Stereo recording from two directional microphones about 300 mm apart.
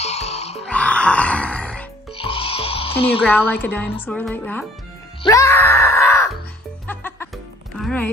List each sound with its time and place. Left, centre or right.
0.0 s music: left
0.7 s music: centre
2.1 s music: centre
3.3 s a woman's voice: centre
5.2 s wail: centre
6.9 s music: centre